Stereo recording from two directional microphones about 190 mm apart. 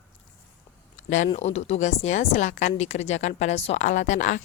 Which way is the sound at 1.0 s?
40° left (ahead or behind).